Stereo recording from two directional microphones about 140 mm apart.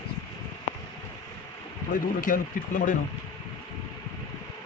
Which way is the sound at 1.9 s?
75° left (ahead or behind).